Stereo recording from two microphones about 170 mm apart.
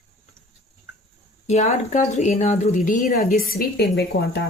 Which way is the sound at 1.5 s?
40° left (ahead or behind).